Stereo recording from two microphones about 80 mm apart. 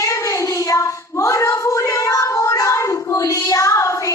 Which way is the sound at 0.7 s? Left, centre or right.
Left.